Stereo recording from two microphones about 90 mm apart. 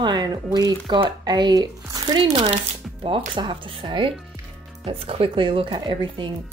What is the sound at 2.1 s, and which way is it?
Speech, 65° right (ahead or behind).